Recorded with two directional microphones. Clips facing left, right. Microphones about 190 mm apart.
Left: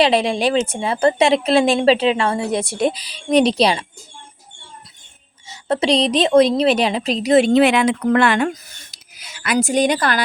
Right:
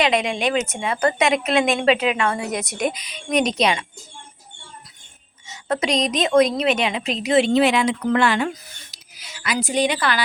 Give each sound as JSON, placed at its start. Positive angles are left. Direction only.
{"t": 0.0, "sound": "a woman's voice", "side_deg": 30}
{"t": 5.5, "sound": "a woman's voice", "side_deg": 30}